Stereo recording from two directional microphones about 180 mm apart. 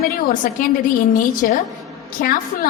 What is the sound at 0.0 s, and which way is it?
A woman's voice, 55° left (ahead or behind).